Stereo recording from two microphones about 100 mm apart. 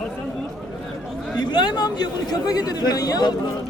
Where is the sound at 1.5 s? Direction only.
45° left (ahead or behind).